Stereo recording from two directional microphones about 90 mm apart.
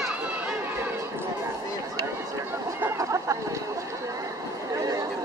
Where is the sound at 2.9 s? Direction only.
35° right (ahead or behind).